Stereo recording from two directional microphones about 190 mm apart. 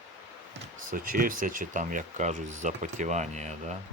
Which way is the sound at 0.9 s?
45° right (ahead or behind).